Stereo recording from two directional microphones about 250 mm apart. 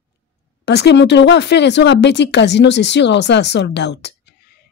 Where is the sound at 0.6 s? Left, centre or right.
Left.